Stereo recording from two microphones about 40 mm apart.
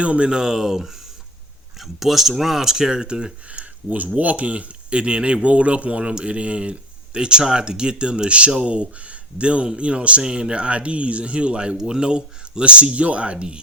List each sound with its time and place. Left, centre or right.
0.0 s speech: right
3.8 s speech: right